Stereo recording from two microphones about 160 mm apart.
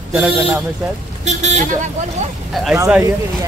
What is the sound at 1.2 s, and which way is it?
Vehicle, 45° right (ahead or behind).